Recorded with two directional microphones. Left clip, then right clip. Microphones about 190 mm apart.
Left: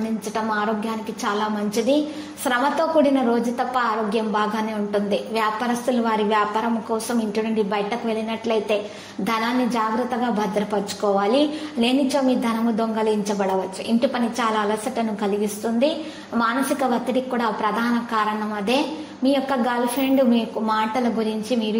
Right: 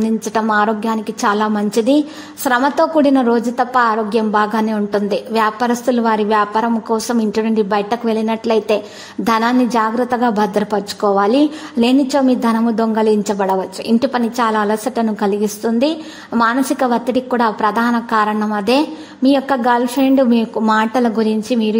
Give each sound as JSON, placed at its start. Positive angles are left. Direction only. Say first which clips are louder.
{"t": 0.3, "sound": "a woman's voice", "louder": "right 8 dB", "side_deg": -45}